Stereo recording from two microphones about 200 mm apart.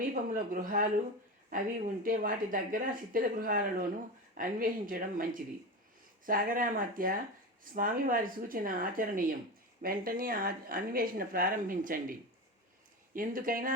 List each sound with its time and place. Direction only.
0.1 s speech: 45° right (ahead or behind)
13.1 s speech: 45° right (ahead or behind)